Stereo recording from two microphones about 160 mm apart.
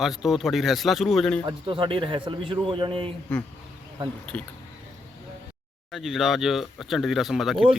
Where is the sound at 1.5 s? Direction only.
30° right (ahead or behind).